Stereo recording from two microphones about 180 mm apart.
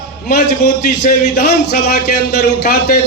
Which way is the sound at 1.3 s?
60° left (ahead or behind).